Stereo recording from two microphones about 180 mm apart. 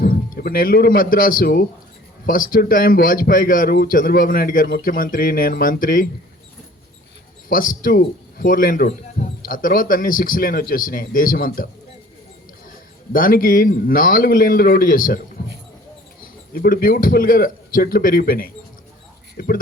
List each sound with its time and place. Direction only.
0.0 s speech: 55° left (ahead or behind)
7.5 s speech: 50° left (ahead or behind)
13.1 s speech: 50° left (ahead or behind)
16.5 s speech: 55° left (ahead or behind)